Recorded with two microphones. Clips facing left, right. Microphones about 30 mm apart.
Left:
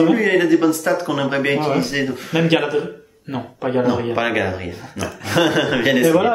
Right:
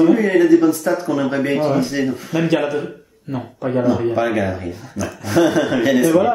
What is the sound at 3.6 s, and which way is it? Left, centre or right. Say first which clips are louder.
Speech: right 1 dB; left.